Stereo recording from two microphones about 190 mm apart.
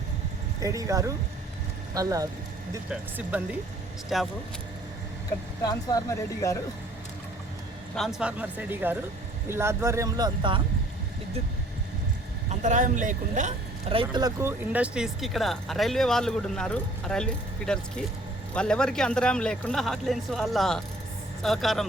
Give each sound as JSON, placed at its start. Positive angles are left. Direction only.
{"t": 0.6, "sound": "speech", "side_deg": -15}
{"t": 5.6, "sound": "speech", "side_deg": 20}
{"t": 7.9, "sound": "speech", "side_deg": 0}
{"t": 12.5, "sound": "speech", "side_deg": -40}
{"t": 13.9, "sound": "speech", "side_deg": -25}